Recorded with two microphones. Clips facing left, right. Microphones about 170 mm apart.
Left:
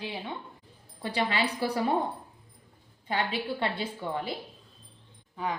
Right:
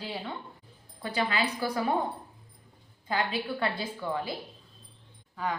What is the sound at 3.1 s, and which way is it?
Speech, 25° left (ahead or behind).